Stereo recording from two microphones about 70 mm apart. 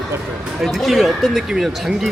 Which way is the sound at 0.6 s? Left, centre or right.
Centre.